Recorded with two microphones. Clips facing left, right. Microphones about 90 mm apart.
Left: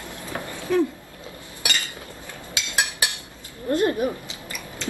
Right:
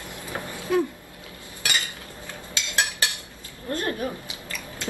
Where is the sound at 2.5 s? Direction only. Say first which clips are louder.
Even; 15° left (ahead or behind).